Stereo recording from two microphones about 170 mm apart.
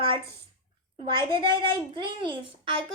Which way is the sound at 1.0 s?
30° right (ahead or behind).